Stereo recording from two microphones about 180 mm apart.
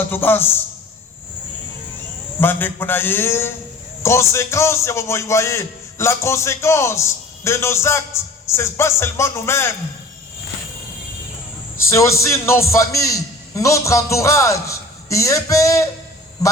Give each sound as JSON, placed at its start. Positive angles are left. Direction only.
{"t": 0.1, "sound": "a man's voice", "side_deg": 10}
{"t": 2.4, "sound": "a man's voice", "side_deg": 10}
{"t": 11.9, "sound": "a man's voice", "side_deg": 15}